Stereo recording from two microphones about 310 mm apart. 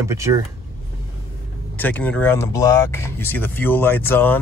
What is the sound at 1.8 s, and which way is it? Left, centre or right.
Speech, centre.